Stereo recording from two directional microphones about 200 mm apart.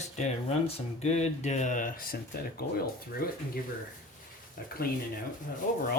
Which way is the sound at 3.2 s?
45° left (ahead or behind).